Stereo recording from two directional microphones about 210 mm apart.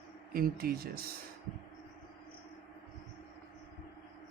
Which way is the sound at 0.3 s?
45° right (ahead or behind).